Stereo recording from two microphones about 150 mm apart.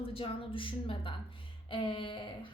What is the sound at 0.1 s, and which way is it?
A woman's voice, 40° left (ahead or behind).